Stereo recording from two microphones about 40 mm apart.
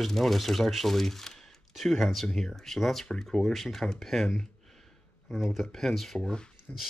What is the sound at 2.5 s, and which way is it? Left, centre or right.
Speech, centre.